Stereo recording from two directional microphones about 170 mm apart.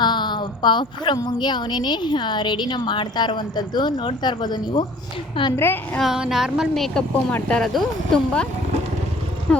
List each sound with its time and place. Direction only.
0.0 s a woman's voice: 25° left (ahead or behind)
5.5 s a woman's voice: 15° left (ahead or behind)
6.0 s speech: centre (ahead or behind)
9.5 s speech: 5° left (ahead or behind)